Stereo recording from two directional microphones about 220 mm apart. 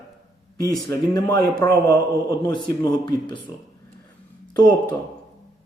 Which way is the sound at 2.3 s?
20° left (ahead or behind).